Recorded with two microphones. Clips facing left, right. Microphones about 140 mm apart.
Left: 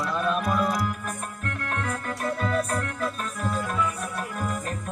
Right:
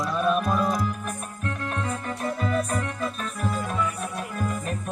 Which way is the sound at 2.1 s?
15° right (ahead or behind).